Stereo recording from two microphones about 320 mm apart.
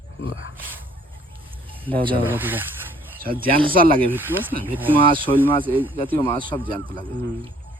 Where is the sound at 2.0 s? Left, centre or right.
Centre.